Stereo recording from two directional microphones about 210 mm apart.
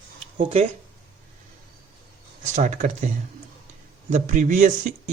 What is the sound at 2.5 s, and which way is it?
Speech, 35° right (ahead or behind).